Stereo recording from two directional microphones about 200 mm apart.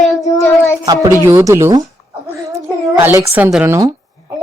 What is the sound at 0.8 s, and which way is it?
A woman's voice, 20° right (ahead or behind).